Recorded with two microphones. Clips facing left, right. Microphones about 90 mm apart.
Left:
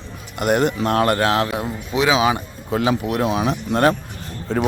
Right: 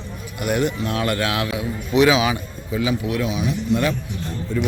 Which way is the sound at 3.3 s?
90° left.